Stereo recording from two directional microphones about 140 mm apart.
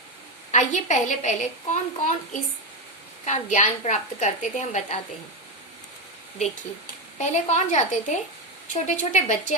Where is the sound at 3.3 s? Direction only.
60° left (ahead or behind).